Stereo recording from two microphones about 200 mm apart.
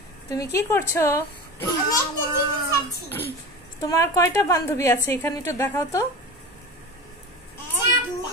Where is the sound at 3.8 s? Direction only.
15° left (ahead or behind).